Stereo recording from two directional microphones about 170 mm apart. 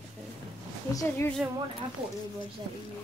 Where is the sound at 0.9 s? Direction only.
20° left (ahead or behind).